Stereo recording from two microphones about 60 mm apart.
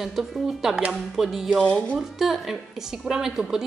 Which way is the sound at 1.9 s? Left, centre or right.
Centre.